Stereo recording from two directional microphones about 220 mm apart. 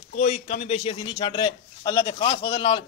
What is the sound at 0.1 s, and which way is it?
A man's voice, 35° left (ahead or behind).